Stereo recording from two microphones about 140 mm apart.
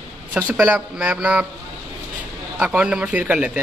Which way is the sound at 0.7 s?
10° right (ahead or behind).